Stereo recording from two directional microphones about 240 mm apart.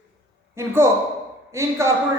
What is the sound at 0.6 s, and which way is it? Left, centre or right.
A man's voice, centre.